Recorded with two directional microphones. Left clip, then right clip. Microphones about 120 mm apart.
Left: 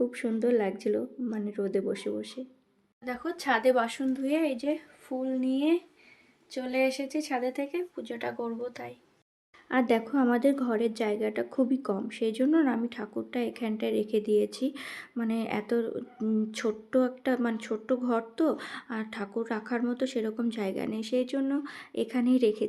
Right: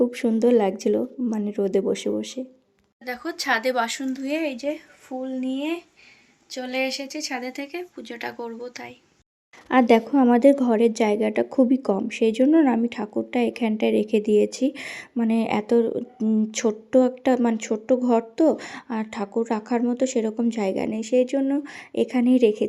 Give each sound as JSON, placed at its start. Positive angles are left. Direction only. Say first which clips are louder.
{"t": 0.0, "sound": "speech", "louder": "right 8 dB", "side_deg": -40}
{"t": 3.0, "sound": "speech", "louder": "right 5 dB", "side_deg": 0}
{"t": 6.5, "sound": "speech", "louder": "right 2 dB", "side_deg": -5}
{"t": 9.6, "sound": "speech", "louder": "right 9 dB", "side_deg": -40}